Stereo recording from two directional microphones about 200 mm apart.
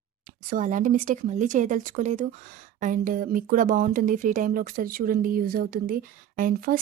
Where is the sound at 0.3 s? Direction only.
40° right (ahead or behind).